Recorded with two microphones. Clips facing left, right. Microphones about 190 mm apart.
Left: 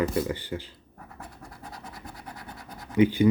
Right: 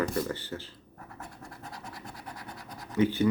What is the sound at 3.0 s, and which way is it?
Speech, 15° left (ahead or behind).